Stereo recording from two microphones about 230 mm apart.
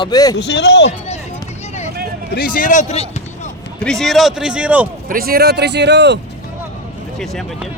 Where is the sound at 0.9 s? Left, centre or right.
Left.